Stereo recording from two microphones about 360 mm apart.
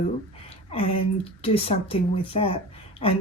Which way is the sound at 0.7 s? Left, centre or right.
Centre.